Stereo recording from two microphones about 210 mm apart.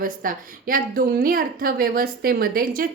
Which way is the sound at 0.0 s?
40° right (ahead or behind).